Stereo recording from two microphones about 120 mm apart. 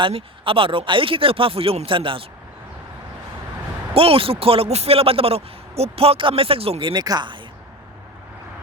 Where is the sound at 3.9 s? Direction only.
50° right (ahead or behind); by 7.4 s 35° right (ahead or behind).